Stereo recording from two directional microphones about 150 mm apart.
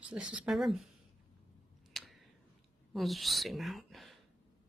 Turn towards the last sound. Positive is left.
turn(degrees=0)  # may be behind; listen again after turning